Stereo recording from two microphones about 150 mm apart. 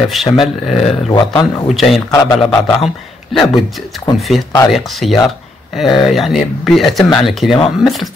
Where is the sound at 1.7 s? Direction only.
Centre (ahead or behind).